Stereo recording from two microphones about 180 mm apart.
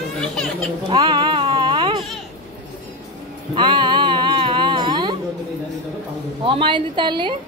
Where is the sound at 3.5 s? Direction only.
25° right (ahead or behind).